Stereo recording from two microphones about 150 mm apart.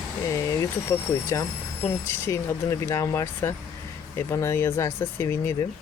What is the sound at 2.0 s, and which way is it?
Speech, 20° left (ahead or behind).